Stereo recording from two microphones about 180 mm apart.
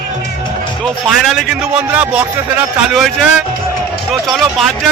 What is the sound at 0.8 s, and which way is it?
Speech, centre (ahead or behind).